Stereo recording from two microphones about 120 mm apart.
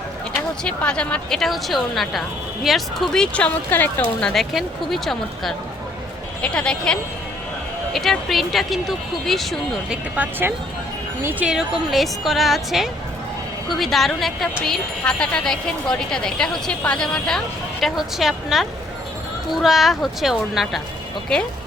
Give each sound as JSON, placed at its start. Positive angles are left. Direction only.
{"t": 0.6, "sound": "speech", "side_deg": 10}
{"t": 4.3, "sound": "speech", "side_deg": 0}
{"t": 11.2, "sound": "speech", "side_deg": -20}
{"t": 11.4, "sound": "speech", "side_deg": 0}